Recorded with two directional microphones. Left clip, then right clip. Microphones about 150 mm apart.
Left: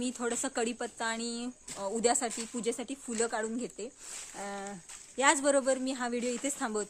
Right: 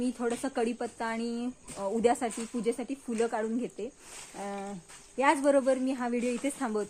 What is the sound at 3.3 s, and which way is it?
Speech, 10° left (ahead or behind).